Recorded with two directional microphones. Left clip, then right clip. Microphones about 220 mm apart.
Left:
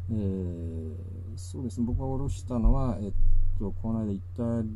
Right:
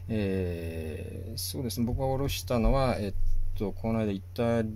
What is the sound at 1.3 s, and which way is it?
Speech, 20° right (ahead or behind).